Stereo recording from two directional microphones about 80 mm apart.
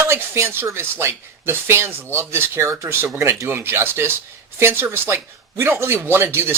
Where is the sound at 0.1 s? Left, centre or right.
Right.